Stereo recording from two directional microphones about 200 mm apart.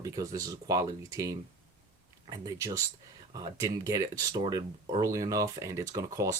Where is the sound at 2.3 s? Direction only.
15° right (ahead or behind).